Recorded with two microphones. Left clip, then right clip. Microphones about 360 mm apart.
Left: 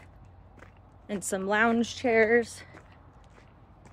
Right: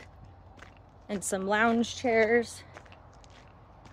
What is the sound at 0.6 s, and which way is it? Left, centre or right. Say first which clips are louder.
Speech: right 1 dB; centre.